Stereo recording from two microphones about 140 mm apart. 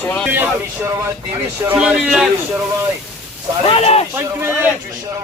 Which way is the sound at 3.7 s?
45° left (ahead or behind).